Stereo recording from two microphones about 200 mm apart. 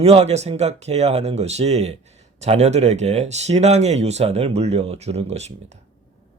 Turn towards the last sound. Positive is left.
turn(degrees=-35)  # may be behind; listen again after turning